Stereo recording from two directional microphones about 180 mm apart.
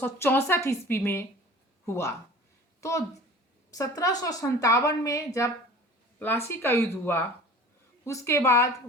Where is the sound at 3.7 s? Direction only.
20° left (ahead or behind).